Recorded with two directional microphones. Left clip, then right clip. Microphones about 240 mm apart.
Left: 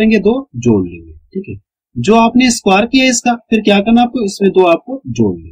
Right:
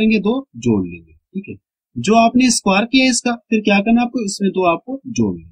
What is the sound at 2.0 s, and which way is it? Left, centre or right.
Speech, centre.